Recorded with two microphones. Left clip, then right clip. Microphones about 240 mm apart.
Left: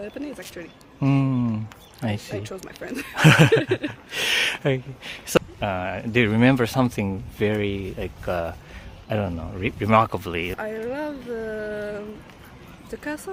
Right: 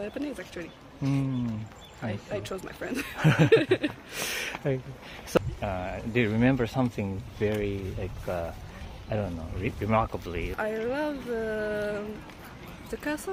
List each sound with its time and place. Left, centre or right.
0.0 s speech: centre
1.0 s speech: left
2.3 s speech: centre
3.2 s a sound: left
3.5 s speech: centre
4.3 s speech: left
10.6 s speech: centre